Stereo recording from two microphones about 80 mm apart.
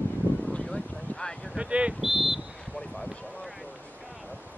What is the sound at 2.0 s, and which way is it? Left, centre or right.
Speech, centre.